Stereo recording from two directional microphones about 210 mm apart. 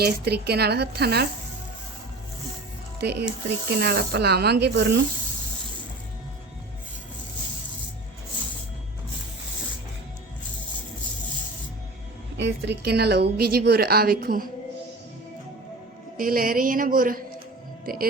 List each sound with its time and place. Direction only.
0.0 s a woman's voice: 50° right (ahead or behind)
3.0 s a woman's voice: 50° right (ahead or behind)
12.4 s a woman's voice: 55° right (ahead or behind)
16.1 s a woman's voice: 45° right (ahead or behind)